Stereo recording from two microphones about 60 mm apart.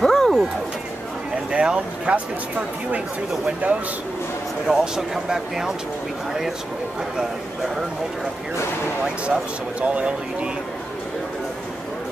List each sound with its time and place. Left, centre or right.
0.0 s a sound: centre
1.5 s speech: centre
3.6 s a man's voice: right
4.6 s speech: centre
9.0 s speech: centre